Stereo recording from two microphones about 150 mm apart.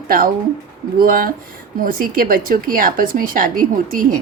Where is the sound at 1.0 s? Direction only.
70° right (ahead or behind).